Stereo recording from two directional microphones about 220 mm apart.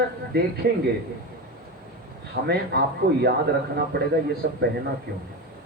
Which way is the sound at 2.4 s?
50° right (ahead or behind).